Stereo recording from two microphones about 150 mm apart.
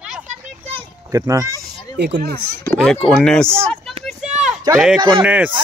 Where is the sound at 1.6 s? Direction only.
90° right.